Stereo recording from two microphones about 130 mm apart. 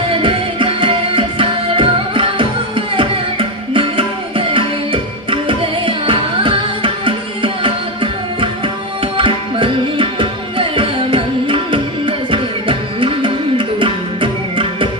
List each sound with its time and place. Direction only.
0.1 s music: 40° right (ahead or behind)
9.1 s tabla: 40° right (ahead or behind)